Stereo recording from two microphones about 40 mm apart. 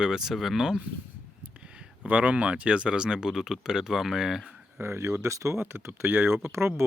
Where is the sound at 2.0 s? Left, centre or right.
Right.